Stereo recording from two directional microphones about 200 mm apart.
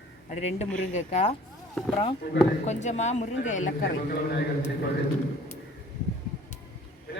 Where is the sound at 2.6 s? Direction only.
35° left (ahead or behind).